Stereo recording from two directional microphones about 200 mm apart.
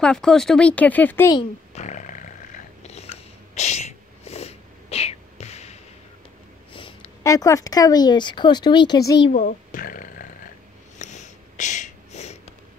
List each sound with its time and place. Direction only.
0.0 s speech: 5° left (ahead or behind)
1.7 s a sound: 35° left (ahead or behind)
2.9 s sneeze: 30° left (ahead or behind)
6.7 s speech: 25° left (ahead or behind)
9.3 s a child's voice: 45° left (ahead or behind)
11.0 s a sound: 35° left (ahead or behind)